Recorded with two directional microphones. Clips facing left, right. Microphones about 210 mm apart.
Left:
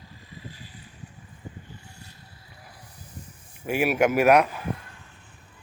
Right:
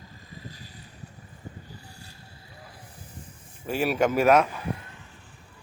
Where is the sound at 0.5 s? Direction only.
40° right (ahead or behind).